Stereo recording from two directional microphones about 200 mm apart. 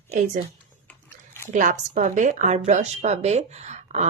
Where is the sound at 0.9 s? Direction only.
10° left (ahead or behind).